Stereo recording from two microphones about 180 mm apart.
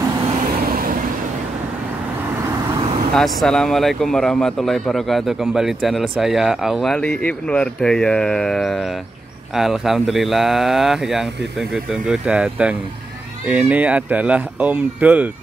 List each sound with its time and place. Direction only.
0.7 s vehicle: 50° right (ahead or behind)
3.2 s speech: 5° left (ahead or behind)